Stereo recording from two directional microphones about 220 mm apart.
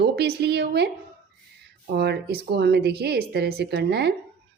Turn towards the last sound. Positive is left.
turn(degrees=-50)  # may be behind; listen again after turning